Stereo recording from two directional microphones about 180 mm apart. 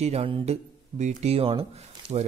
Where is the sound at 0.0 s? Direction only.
35° right (ahead or behind).